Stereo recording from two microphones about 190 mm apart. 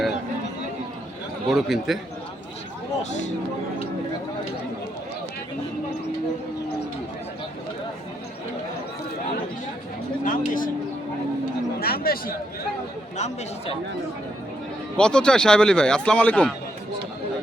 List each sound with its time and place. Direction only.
1.5 s a man's voice: centre (ahead or behind)
3.1 s speech: 40° left (ahead or behind)
10.2 s speech: 45° left (ahead or behind)
11.8 s speech: 50° left (ahead or behind)
13.1 s speech: 35° left (ahead or behind)
14.9 s a man's voice: 5° left (ahead or behind)